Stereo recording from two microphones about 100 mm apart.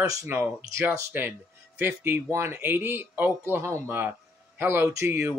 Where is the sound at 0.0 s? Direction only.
35° right (ahead or behind).